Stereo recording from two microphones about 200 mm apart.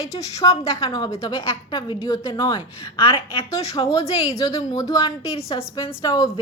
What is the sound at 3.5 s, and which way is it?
A woman's voice, 15° left (ahead or behind).